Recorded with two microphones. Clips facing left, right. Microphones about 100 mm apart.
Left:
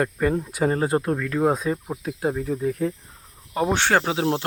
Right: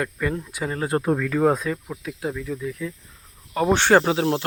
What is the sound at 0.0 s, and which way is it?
Speech, 35° left (ahead or behind).